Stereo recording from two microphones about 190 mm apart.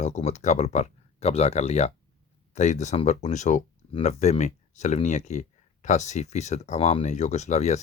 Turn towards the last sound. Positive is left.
turn(degrees=35)  # may be behind; listen again after turning